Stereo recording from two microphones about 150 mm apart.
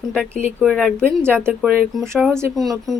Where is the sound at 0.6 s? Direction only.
5° left (ahead or behind).